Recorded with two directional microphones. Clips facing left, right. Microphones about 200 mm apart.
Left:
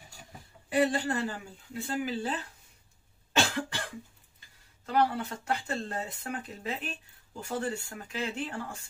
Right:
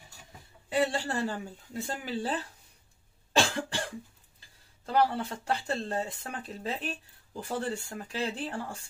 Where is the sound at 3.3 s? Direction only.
30° right (ahead or behind).